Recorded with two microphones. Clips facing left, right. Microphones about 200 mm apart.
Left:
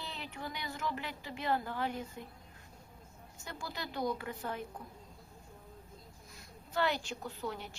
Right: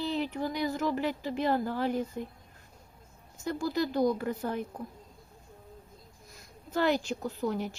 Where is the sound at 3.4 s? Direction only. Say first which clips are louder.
Right 14 dB; 40° right (ahead or behind).